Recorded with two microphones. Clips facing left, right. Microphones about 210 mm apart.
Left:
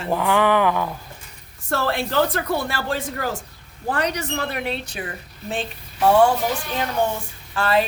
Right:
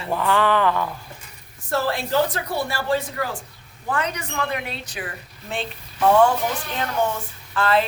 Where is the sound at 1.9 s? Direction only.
60° left (ahead or behind).